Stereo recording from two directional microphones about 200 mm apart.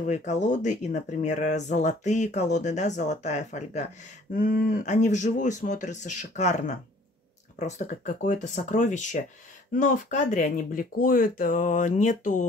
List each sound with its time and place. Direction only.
0.0 s speech: 35° left (ahead or behind)